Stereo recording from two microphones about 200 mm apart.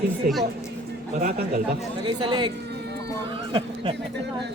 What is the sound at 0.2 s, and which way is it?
Speech, 45° right (ahead or behind).